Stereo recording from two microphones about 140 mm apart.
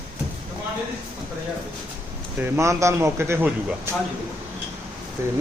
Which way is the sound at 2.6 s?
20° right (ahead or behind).